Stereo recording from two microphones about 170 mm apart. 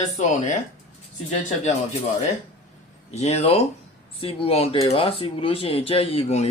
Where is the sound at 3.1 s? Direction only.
40° left (ahead or behind).